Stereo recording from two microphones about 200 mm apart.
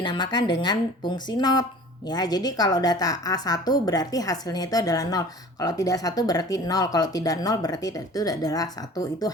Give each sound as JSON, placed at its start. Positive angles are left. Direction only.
{"t": 0.0, "sound": "a woman's voice", "side_deg": 20}